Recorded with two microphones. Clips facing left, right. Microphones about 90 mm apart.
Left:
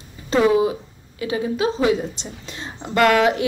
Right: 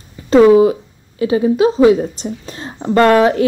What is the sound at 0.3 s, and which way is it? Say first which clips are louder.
A woman's voice: right 9 dB; 35° right (ahead or behind).